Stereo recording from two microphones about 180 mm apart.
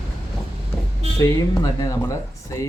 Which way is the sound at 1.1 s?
20° left (ahead or behind).